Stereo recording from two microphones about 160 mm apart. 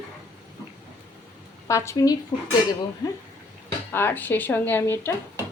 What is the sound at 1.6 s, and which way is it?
Speech, 20° left (ahead or behind).